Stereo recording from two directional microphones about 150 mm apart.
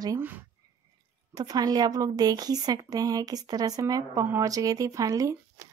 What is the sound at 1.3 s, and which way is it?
A woman's voice, 25° right (ahead or behind).